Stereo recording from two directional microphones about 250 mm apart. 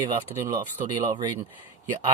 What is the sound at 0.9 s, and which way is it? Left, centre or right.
Speech, centre.